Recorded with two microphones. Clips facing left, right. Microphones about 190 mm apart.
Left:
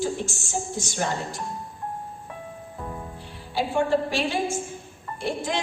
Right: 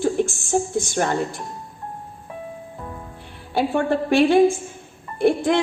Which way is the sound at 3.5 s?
55° right (ahead or behind).